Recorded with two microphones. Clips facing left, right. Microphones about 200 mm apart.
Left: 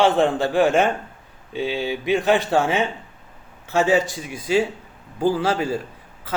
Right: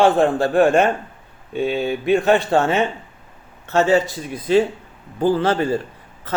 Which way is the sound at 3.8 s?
15° left (ahead or behind).